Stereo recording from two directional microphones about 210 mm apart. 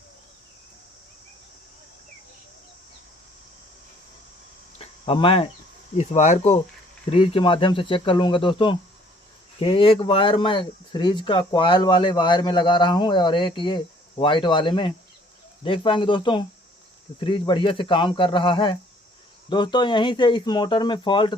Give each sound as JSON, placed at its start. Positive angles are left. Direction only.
{"t": 4.8, "sound": "cricket", "side_deg": 25}
{"t": 6.0, "sound": "speech", "side_deg": 35}